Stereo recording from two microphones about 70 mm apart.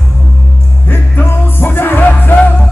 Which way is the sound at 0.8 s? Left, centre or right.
Left.